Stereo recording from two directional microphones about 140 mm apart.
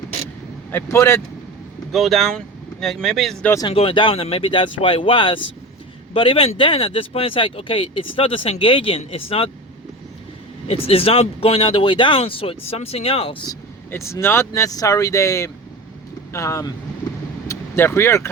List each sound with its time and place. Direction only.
0.7 s speech: 20° left (ahead or behind)
1.9 s speech: centre (ahead or behind)
3.7 s speech: 40° left (ahead or behind)
10.7 s speech: 45° left (ahead or behind)
13.9 s speech: 20° left (ahead or behind)